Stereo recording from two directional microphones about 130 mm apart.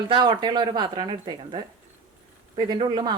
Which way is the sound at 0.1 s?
35° right (ahead or behind).